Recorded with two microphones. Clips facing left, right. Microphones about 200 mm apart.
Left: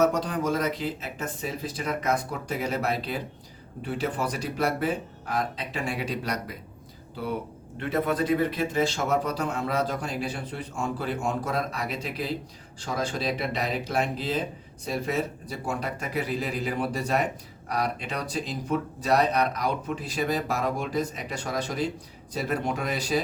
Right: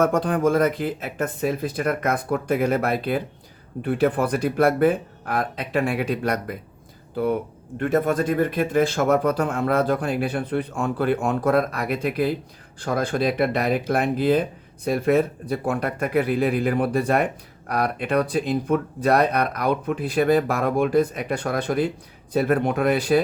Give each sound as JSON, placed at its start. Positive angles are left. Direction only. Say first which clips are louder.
{"t": 0.0, "sound": "speech", "louder": "right 5 dB", "side_deg": -55}
{"t": 7.8, "sound": "speech", "louder": "right 5 dB", "side_deg": -50}